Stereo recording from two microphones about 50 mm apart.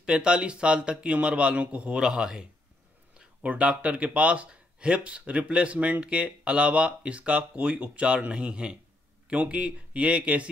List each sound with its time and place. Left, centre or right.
0.0 s speech: centre
3.4 s speech: right